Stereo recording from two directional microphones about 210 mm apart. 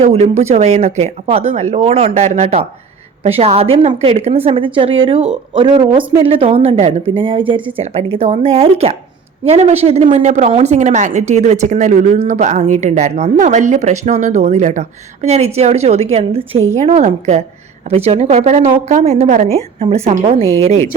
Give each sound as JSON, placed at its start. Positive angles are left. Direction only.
{"t": 0.0, "sound": "a woman's voice", "side_deg": -30}